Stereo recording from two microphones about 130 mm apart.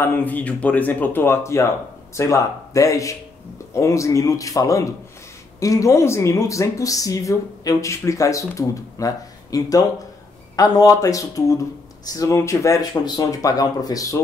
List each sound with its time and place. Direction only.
0.0 s speech: 15° left (ahead or behind)